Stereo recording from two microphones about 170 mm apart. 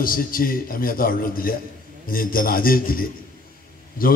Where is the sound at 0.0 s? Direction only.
55° left (ahead or behind).